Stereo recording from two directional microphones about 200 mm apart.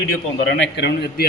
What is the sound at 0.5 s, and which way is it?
Speech, 60° left (ahead or behind).